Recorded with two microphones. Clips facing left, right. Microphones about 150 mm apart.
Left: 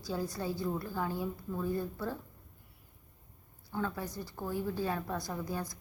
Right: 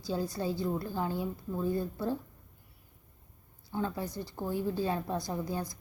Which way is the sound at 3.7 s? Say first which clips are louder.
Right 2 dB; 20° right (ahead or behind).